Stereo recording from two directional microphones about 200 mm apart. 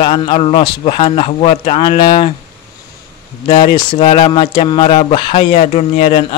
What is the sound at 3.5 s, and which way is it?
Speech, 25° left (ahead or behind).